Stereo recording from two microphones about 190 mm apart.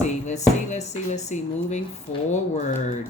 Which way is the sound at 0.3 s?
35° left (ahead or behind).